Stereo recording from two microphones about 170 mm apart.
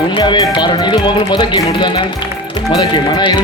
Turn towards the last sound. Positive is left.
turn(degrees=25)  # may be behind; listen again after turning